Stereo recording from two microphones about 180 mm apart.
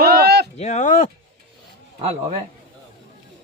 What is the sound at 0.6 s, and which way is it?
Speech, 40° left (ahead or behind).